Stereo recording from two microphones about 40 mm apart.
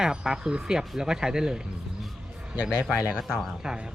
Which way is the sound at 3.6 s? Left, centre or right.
Centre.